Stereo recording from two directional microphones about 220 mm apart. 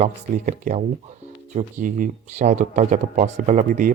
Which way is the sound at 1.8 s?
35° right (ahead or behind).